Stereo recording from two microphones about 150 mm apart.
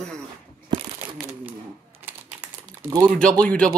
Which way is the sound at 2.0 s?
10° right (ahead or behind).